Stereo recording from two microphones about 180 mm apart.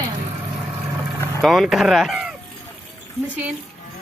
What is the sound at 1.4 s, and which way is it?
Speech, centre (ahead or behind).